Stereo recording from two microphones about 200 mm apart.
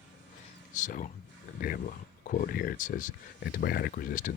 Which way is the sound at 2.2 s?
40° left (ahead or behind).